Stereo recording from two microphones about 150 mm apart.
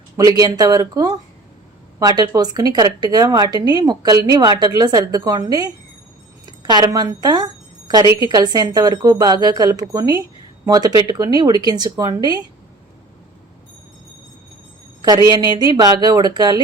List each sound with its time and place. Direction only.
0.2 s a woman's voice: 25° right (ahead or behind)
15.0 s a woman's voice: 25° right (ahead or behind)